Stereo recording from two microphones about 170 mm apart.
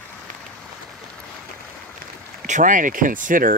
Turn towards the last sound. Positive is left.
turn(degrees=-55)  # may be behind; listen again after turning